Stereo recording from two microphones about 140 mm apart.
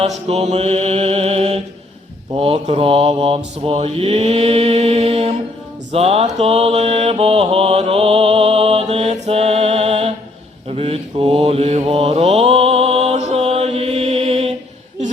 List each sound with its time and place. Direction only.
0.0 s mantra: 50° right (ahead or behind)